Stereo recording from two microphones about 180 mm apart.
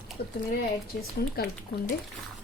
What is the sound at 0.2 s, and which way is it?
Speech, 60° left (ahead or behind).